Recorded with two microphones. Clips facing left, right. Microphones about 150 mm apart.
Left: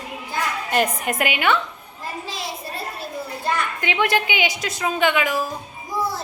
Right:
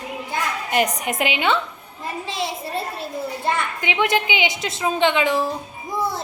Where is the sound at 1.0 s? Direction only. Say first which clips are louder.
Even; 20° right (ahead or behind).